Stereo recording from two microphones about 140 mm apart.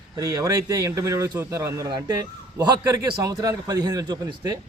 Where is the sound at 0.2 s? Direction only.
25° right (ahead or behind).